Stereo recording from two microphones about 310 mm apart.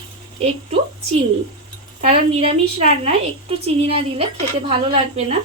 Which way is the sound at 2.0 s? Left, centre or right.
Centre.